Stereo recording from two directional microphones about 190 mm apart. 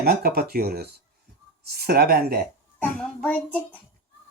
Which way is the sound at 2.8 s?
10° left (ahead or behind).